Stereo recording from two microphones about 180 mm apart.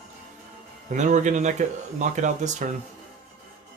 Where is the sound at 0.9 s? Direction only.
45° right (ahead or behind).